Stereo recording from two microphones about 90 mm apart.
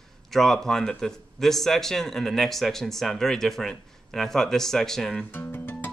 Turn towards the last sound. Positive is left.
turn(degrees=20)  # may be behind; listen again after turning